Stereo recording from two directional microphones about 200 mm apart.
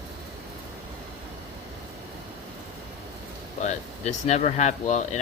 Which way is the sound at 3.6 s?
35° left (ahead or behind).